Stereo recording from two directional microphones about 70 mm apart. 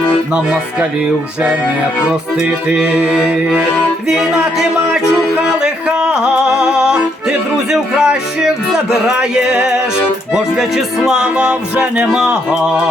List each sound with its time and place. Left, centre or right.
0.3 s speech: centre
2.0 s speech: centre
2.8 s speech: centre
4.1 s music: centre
5.6 s music: centre
8.7 s a sound: centre
9.2 s speech: centre